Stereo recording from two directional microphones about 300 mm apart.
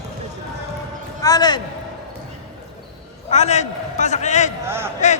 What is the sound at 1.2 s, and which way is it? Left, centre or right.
Speech, centre.